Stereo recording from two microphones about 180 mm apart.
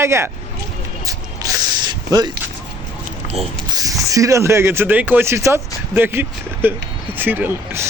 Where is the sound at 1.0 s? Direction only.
20° right (ahead or behind).